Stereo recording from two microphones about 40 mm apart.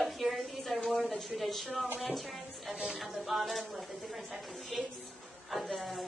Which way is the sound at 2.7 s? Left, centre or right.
Centre.